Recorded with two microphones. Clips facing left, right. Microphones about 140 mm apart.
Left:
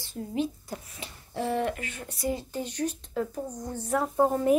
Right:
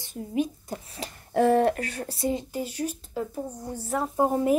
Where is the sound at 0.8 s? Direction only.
30° right (ahead or behind).